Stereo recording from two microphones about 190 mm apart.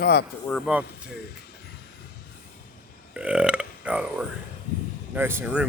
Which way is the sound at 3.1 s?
5° right (ahead or behind).